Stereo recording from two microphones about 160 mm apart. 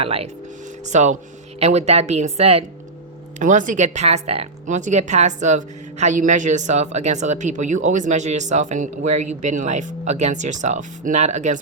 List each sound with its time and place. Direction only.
0.0 s speech: 35° right (ahead or behind)
0.9 s speech: 45° right (ahead or behind)
3.3 s speech: 50° right (ahead or behind)